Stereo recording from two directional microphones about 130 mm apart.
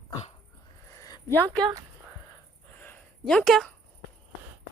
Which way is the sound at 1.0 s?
30° left (ahead or behind).